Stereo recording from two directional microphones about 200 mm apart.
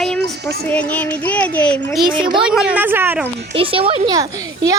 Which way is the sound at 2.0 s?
25° right (ahead or behind).